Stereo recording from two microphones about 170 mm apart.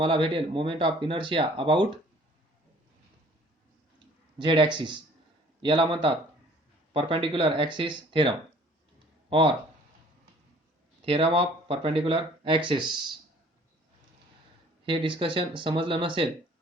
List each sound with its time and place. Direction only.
0.0 s speech: 30° right (ahead or behind)
4.4 s speech: 30° right (ahead or behind)
11.0 s speech: 30° right (ahead or behind)
14.8 s speech: 30° right (ahead or behind)